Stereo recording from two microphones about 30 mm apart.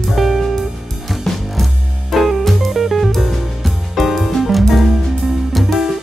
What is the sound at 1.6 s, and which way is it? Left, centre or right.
Music, centre.